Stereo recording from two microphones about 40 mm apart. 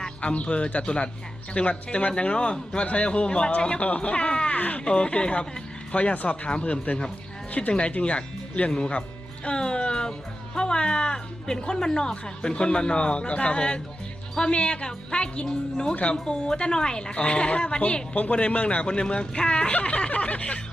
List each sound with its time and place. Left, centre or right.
0.2 s speech: left
4.9 s speech: left